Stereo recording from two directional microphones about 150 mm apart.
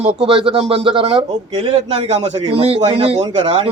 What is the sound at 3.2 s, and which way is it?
Speech, 30° right (ahead or behind).